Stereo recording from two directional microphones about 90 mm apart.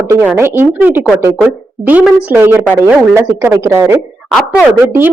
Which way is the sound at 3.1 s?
30° right (ahead or behind).